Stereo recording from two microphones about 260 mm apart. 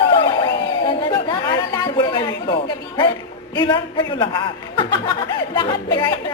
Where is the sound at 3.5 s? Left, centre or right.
Centre.